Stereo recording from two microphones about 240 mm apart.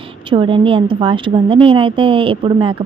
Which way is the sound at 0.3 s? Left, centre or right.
Right.